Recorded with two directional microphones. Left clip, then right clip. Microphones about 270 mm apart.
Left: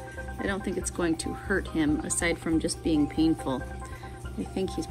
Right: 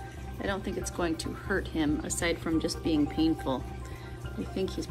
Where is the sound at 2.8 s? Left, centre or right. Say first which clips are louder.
Left 3 dB; centre.